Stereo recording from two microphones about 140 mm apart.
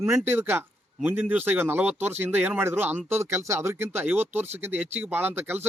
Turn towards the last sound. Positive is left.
turn(degrees=-15)  # may be behind; listen again after turning